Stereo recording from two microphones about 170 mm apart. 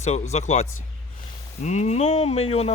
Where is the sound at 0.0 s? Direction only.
40° left (ahead or behind).